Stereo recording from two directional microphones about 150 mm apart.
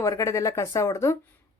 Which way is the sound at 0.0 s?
20° left (ahead or behind).